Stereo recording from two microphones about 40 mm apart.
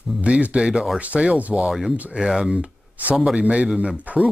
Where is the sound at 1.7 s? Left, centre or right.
Centre.